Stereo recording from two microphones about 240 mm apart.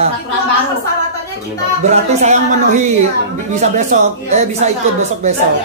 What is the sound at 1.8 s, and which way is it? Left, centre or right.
A woman's voice, right.